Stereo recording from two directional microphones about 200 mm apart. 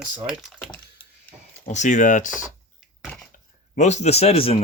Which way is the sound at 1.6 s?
35° left (ahead or behind).